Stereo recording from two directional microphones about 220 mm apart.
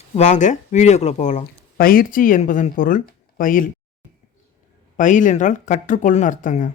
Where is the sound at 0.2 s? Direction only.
35° left (ahead or behind).